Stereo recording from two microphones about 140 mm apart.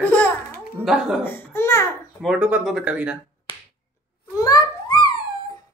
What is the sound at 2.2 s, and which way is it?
A man's voice, 5° right (ahead or behind).